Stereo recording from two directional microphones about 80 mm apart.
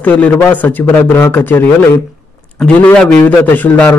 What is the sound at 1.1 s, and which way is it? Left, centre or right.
Speech, left.